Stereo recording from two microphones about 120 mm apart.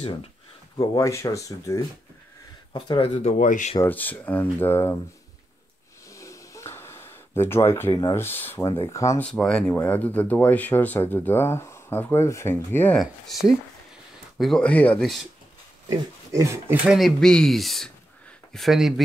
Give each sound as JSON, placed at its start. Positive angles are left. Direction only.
{"t": 0.7, "sound": "speech", "side_deg": 30}
{"t": 2.7, "sound": "speech", "side_deg": 40}
{"t": 3.2, "sound": "speech", "side_deg": 75}
{"t": 3.8, "sound": "speech", "side_deg": 15}
{"t": 6.0, "sound": "a sound", "side_deg": 25}
{"t": 8.2, "sound": "speech", "side_deg": 15}
{"t": 9.2, "sound": "speech", "side_deg": 5}
{"t": 12.9, "sound": "speech", "side_deg": 0}
{"t": 15.9, "sound": "speech", "side_deg": -25}
{"t": 16.8, "sound": "speech", "side_deg": 0}